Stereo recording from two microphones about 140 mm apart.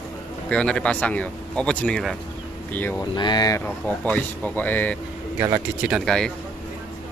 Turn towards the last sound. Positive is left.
turn(degrees=5)  # may be behind; listen again after turning